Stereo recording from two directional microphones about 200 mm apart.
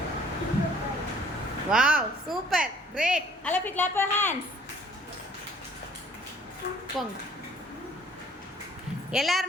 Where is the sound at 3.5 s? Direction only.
10° left (ahead or behind).